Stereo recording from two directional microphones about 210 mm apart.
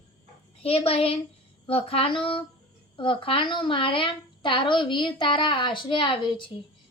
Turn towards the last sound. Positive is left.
turn(degrees=25)  # may be behind; listen again after turning